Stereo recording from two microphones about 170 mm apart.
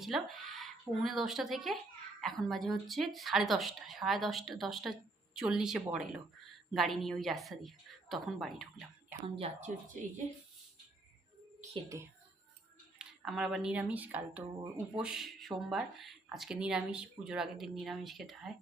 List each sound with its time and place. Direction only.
0.0 s a woman's voice: centre (ahead or behind)
9.3 s speech: 40° right (ahead or behind)
11.9 s speech: 15° right (ahead or behind)
13.0 s a woman's voice: 5° right (ahead or behind)